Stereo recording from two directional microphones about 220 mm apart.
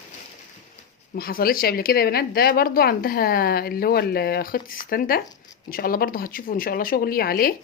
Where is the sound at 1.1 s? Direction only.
45° left (ahead or behind).